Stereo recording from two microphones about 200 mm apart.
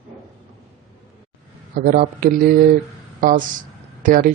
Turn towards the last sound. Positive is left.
turn(degrees=-45)  # may be behind; listen again after turning